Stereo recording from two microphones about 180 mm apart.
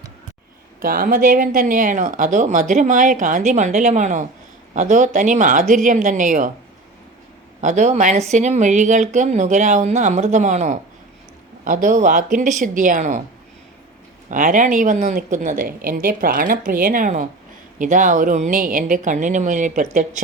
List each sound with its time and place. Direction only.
0.8 s speech: 50° right (ahead or behind)
7.6 s speech: 45° right (ahead or behind)
14.3 s speech: 45° right (ahead or behind)